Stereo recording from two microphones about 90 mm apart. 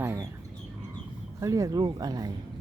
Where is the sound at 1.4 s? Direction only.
40° right (ahead or behind).